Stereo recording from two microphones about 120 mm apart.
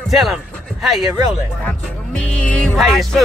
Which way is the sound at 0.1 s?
Centre (ahead or behind).